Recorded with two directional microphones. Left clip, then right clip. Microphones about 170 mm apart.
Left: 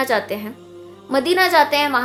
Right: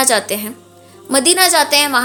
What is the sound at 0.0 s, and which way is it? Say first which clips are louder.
A woman's voice: right 4 dB; 25° right (ahead or behind).